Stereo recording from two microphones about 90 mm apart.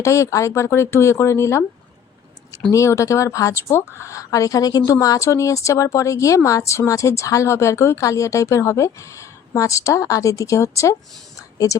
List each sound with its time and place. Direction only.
0.0 s speech: 35° left (ahead or behind)
2.7 s a woman's voice: 35° left (ahead or behind)